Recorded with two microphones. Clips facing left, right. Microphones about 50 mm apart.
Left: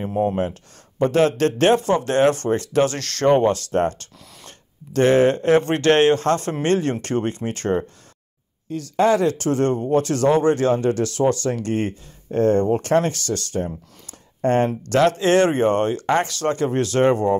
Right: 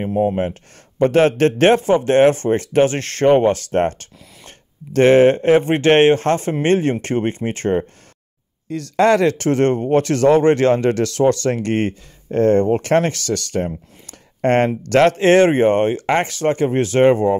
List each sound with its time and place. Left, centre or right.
0.1 s speech: centre
0.4 s speech: right
8.9 s speech: right
9.4 s speech: right
14.9 s speech: right